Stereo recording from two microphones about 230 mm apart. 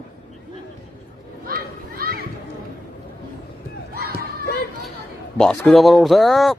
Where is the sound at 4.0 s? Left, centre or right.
Right.